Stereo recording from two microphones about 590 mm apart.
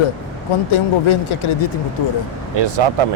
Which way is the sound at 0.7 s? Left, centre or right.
Left.